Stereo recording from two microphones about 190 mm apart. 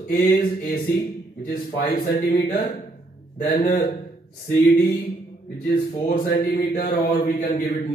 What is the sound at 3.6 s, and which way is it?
Speech, 45° left (ahead or behind).